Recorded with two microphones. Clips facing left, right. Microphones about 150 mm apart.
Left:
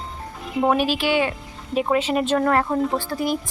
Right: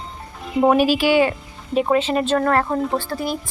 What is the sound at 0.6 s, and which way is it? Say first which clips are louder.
Speech: right 4 dB; 5° right (ahead or behind).